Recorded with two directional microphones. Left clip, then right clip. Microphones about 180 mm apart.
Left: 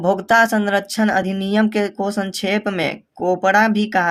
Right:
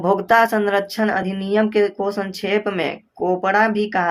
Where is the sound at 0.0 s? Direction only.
35° left (ahead or behind).